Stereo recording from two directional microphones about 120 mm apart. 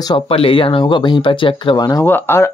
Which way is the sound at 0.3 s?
50° left (ahead or behind).